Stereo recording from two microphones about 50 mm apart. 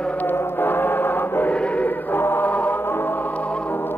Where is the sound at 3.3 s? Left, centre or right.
Left.